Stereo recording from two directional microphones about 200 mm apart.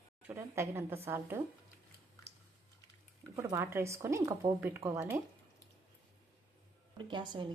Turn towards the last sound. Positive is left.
turn(degrees=-25)  # may be behind; listen again after turning